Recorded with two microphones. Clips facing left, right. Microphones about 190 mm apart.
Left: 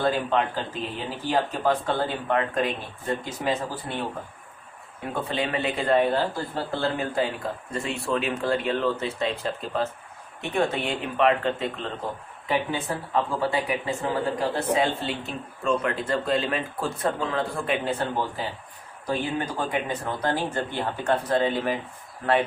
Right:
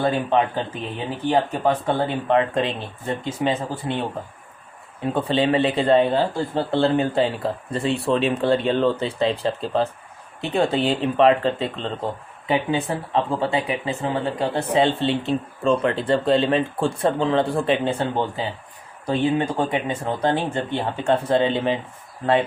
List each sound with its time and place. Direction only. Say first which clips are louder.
0.0 s speech: right 4 dB; 20° right (ahead or behind)
5.1 s speech: right 8 dB; 25° right (ahead or behind)